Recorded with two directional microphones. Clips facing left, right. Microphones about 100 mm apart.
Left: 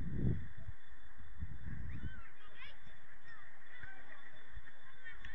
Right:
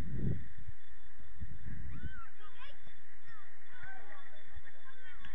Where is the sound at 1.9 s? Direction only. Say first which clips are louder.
Right 2 dB; 40° right (ahead or behind).